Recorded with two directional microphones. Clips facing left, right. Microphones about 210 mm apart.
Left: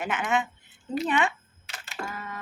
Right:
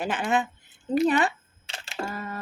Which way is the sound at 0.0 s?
35° right (ahead or behind).